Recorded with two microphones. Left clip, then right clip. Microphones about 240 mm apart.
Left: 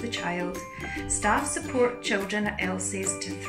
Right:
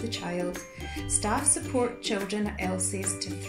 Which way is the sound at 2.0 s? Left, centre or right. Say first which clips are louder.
Left 3 dB; centre.